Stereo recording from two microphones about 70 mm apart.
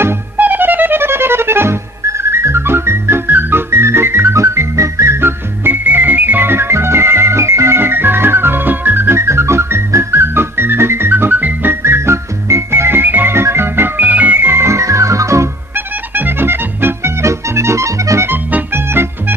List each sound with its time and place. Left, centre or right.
0.3 s music: right
11.3 s music: right
15.7 s music: right
18.3 s music: right